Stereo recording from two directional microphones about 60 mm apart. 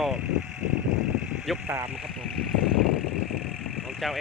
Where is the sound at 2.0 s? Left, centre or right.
Centre.